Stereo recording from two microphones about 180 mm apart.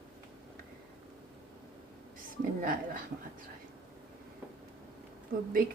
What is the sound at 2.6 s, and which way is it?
Speech, 50° right (ahead or behind).